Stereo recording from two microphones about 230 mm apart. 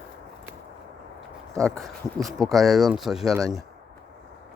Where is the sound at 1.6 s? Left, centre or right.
Centre.